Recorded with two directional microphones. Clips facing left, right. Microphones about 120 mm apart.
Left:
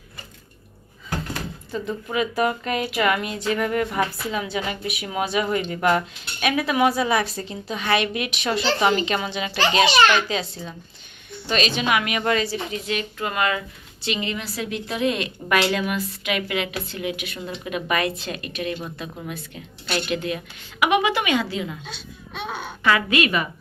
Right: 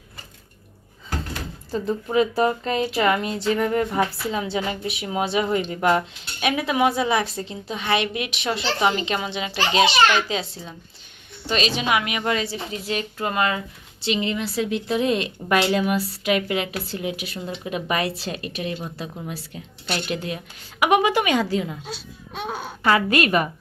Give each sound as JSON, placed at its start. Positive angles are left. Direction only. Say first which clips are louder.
{"t": 1.7, "sound": "speech", "louder": "right 5 dB", "side_deg": -35}
{"t": 12.5, "sound": "a woman's voice", "louder": "left 1 dB", "side_deg": -30}